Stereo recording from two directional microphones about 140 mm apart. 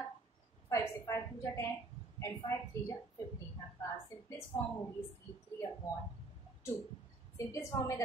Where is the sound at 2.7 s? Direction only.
20° left (ahead or behind).